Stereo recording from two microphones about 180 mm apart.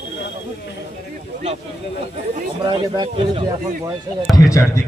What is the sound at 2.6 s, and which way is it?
Speech, 25° right (ahead or behind).